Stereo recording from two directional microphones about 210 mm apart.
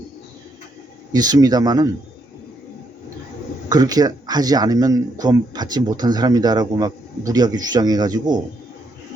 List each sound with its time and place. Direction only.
1.1 s speech: 20° right (ahead or behind)
3.7 s speech: 20° right (ahead or behind)